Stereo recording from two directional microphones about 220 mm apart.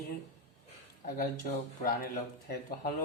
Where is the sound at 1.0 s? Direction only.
40° left (ahead or behind).